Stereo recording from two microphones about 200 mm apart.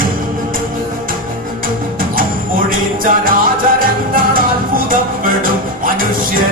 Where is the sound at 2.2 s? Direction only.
45° right (ahead or behind).